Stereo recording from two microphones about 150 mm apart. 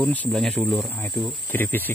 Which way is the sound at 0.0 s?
10° left (ahead or behind).